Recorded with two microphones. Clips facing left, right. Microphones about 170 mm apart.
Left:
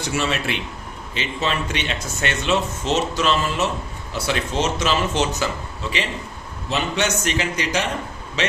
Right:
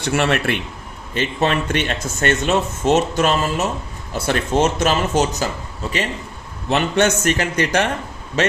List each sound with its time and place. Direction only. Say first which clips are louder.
0.0 s speech: right 5 dB; 60° right (ahead or behind); by 5.5 s 40° right (ahead or behind)
6.7 s speech: right 6 dB; 55° right (ahead or behind)